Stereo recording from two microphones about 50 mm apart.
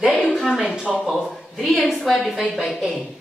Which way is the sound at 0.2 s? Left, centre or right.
Centre.